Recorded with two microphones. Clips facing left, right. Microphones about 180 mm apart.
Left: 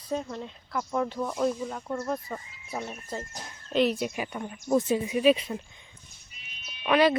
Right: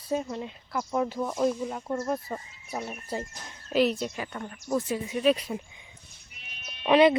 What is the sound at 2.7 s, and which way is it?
Speech, 5° right (ahead or behind).